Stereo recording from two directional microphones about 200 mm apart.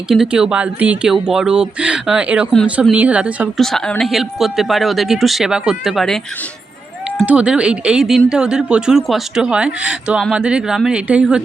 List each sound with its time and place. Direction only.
0.1 s speech: 5° right (ahead or behind)
7.2 s speech: 5° right (ahead or behind)